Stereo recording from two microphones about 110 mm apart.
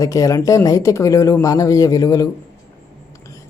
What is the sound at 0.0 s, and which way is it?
Speech, 30° left (ahead or behind).